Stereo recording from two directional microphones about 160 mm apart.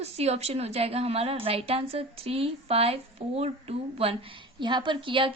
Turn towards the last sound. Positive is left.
turn(degrees=-30)  # may be behind; listen again after turning